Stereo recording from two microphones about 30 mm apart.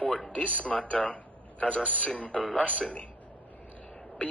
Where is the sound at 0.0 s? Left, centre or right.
Left.